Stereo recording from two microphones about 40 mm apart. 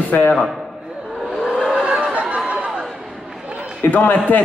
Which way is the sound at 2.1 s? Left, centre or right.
Right.